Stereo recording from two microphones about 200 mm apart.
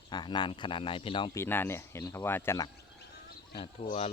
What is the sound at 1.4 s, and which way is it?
Speech, 10° left (ahead or behind).